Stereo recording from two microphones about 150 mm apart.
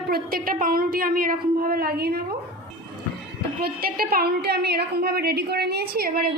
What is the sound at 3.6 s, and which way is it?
A woman's voice, 85° right.